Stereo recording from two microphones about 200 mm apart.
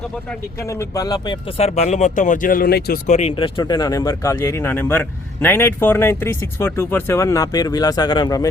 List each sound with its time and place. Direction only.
0.3 s speech: 15° left (ahead or behind); by 3.0 s 50° left (ahead or behind)
3.1 s speech: 35° left (ahead or behind)